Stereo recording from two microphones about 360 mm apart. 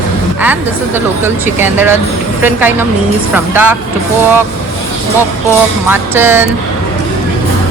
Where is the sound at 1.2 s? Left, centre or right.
Centre.